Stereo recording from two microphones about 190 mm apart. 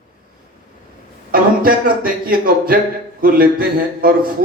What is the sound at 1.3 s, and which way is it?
Speech, 50° right (ahead or behind).